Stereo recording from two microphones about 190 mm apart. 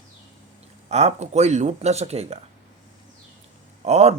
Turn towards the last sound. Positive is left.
turn(degrees=-35)  # may be behind; listen again after turning